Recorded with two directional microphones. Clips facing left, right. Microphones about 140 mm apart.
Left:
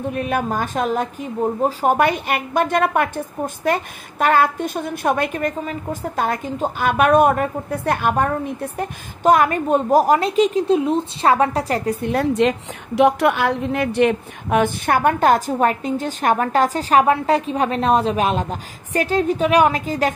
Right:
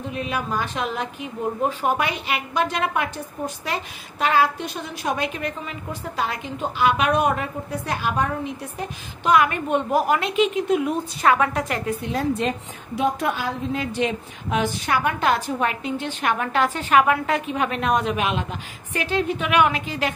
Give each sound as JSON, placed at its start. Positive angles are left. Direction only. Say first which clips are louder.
{"t": 0.1, "sound": "a woman's voice", "louder": "left 3 dB", "side_deg": 50}
{"t": 12.0, "sound": "a woman's voice", "louder": "left 7 dB", "side_deg": 65}